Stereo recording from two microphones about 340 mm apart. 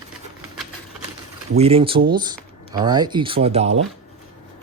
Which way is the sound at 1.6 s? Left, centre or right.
Centre.